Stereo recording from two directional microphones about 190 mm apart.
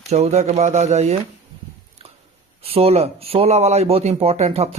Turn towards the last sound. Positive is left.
turn(degrees=-35)  # may be behind; listen again after turning